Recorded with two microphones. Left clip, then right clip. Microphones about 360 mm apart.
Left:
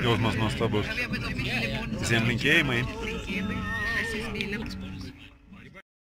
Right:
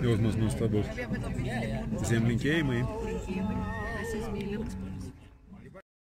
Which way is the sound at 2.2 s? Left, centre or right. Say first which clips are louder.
Left 8 dB; centre.